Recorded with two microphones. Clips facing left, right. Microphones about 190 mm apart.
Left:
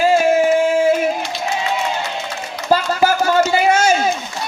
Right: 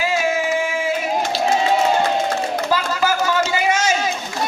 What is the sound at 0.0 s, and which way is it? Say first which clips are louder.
Music: left 7 dB; 50° left (ahead or behind).